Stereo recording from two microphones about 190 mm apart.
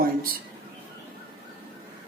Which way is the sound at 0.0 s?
50° right (ahead or behind).